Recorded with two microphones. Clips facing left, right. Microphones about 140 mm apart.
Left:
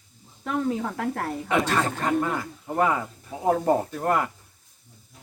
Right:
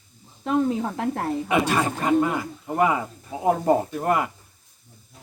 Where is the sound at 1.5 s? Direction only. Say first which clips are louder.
Right 1 dB; 10° right (ahead or behind).